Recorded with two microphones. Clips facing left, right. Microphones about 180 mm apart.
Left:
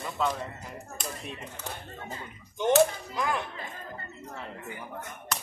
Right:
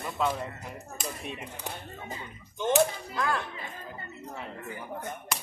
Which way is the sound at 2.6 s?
15° left (ahead or behind).